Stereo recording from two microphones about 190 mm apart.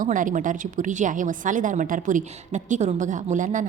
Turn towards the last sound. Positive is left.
turn(degrees=-40)  # may be behind; listen again after turning